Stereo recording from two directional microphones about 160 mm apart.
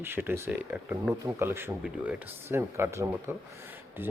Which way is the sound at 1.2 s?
15° right (ahead or behind).